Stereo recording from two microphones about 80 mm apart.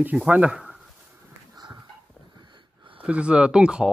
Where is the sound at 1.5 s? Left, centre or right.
Right.